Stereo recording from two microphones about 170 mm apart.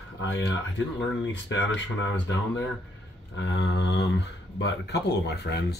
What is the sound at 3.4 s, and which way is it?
Speech, 90° left.